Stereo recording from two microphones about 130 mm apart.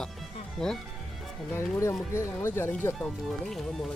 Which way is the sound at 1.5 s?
20° left (ahead or behind).